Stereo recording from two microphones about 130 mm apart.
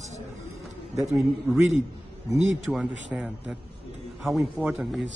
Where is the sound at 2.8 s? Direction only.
10° right (ahead or behind).